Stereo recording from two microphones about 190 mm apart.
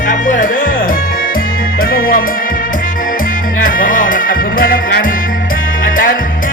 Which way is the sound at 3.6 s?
45° left (ahead or behind).